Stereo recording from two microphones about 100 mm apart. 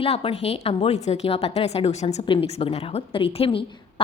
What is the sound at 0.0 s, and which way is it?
A woman's voice, 70° left (ahead or behind).